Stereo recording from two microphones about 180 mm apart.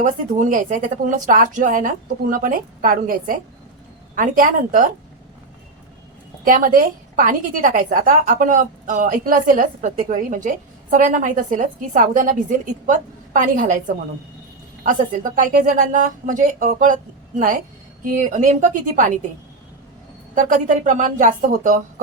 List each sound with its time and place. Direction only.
0.0 s a woman's voice: 45° right (ahead or behind)
6.4 s a woman's voice: 50° right (ahead or behind)
20.3 s a woman's voice: 45° right (ahead or behind)